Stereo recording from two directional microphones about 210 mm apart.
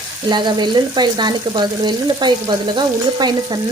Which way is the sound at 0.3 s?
20° right (ahead or behind).